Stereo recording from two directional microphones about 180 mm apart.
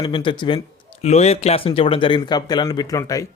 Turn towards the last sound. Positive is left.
turn(degrees=20)  # may be behind; listen again after turning